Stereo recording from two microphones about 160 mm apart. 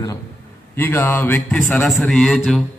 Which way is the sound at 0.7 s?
15° left (ahead or behind).